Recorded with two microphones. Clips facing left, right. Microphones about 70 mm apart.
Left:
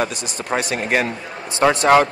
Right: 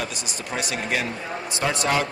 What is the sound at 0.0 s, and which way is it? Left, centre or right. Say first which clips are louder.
Speech: left 7 dB; left.